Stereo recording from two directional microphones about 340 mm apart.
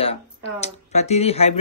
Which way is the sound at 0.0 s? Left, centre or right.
Centre.